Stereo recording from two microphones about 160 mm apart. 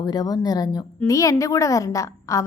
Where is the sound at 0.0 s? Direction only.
25° left (ahead or behind).